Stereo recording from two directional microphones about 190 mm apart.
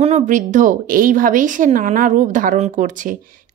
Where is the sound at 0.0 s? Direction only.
40° right (ahead or behind).